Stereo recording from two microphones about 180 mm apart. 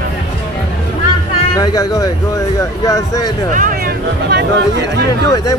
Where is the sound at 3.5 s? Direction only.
50° right (ahead or behind).